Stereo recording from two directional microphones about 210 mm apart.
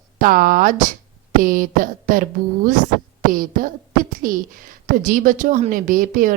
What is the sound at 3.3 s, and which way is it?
A woman's voice, 40° right (ahead or behind).